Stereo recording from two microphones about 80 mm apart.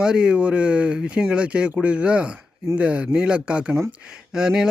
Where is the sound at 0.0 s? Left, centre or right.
Centre.